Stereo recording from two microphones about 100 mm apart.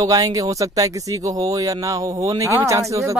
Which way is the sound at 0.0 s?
35° right (ahead or behind).